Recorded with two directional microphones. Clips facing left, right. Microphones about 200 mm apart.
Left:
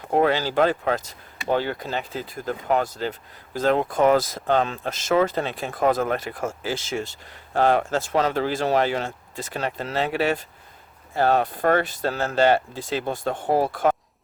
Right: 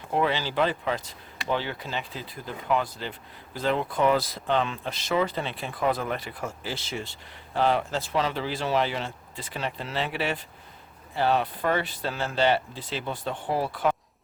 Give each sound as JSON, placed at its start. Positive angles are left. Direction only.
{"t": 0.1, "sound": "speech", "side_deg": 45}